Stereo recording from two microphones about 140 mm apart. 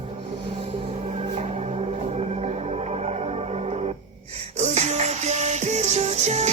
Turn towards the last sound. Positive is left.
turn(degrees=-55)  # may be behind; listen again after turning